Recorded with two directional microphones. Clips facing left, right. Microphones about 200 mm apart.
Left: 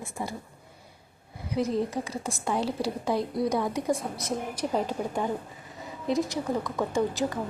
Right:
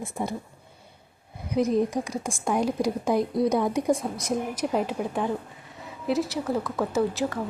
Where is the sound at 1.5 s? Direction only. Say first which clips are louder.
Right 4 dB; 15° right (ahead or behind).